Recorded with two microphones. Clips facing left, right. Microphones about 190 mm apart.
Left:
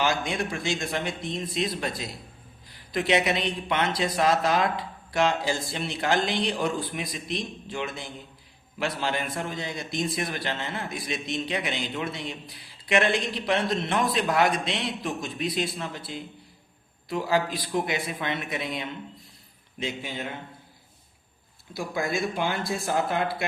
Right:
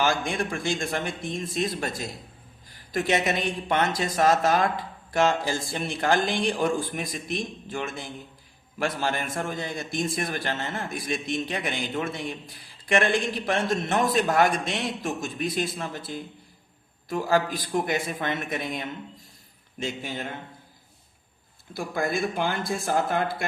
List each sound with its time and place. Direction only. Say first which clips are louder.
0.0 s a man's voice: right 1 dB; 50° right (ahead or behind)
21.8 s a man's voice: right 1 dB; 55° right (ahead or behind)